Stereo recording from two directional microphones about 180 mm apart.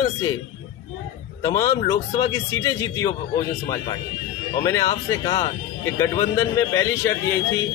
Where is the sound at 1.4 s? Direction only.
20° left (ahead or behind).